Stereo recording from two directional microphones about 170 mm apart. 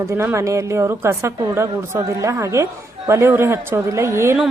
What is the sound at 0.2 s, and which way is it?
A woman's voice, 15° right (ahead or behind).